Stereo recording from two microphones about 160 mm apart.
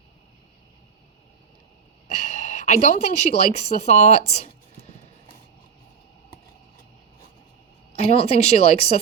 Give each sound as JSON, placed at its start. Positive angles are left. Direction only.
{"t": 2.0, "sound": "speech", "side_deg": 45}
{"t": 8.1, "sound": "speech", "side_deg": 40}